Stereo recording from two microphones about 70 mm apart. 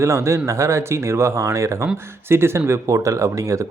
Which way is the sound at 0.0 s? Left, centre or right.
Right.